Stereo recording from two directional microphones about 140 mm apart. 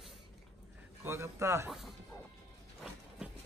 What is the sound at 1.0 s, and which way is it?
Speech, 20° right (ahead or behind).